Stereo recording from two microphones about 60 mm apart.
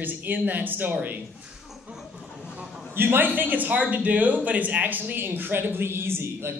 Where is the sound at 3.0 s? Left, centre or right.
Right.